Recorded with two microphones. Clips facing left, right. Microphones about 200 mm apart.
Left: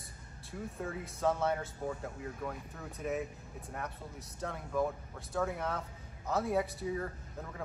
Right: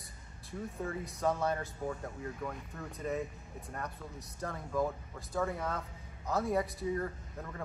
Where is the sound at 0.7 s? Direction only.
Centre (ahead or behind).